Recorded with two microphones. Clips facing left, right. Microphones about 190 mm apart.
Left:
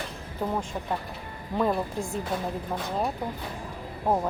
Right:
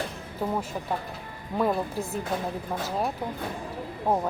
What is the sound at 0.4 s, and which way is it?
Speech, 5° right (ahead or behind).